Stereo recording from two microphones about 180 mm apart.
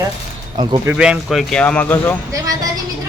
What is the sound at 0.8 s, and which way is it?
A man's voice, 5° right (ahead or behind).